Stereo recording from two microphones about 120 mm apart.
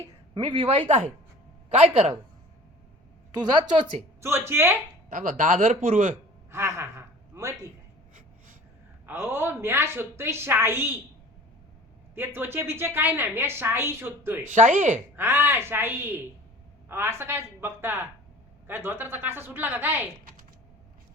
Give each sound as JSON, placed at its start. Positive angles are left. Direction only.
{"t": 0.4, "sound": "speech", "side_deg": -45}
{"t": 0.7, "sound": "speech", "side_deg": -65}
{"t": 4.2, "sound": "a woman's voice", "side_deg": -20}
{"t": 5.0, "sound": "a man's voice", "side_deg": -90}
{"t": 6.5, "sound": "a sound", "side_deg": -25}
{"t": 9.0, "sound": "a woman's voice", "side_deg": -20}
{"t": 12.1, "sound": "a woman's voice", "side_deg": -20}
{"t": 14.5, "sound": "a man's voice", "side_deg": -90}
{"t": 15.1, "sound": "a woman's voice", "side_deg": -20}